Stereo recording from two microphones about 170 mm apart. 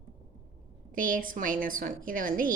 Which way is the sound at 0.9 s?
55° right (ahead or behind).